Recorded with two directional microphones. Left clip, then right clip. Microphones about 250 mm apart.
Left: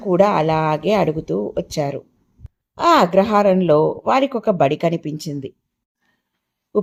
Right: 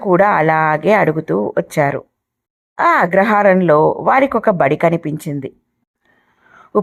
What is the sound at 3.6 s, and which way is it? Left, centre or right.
Speech, centre.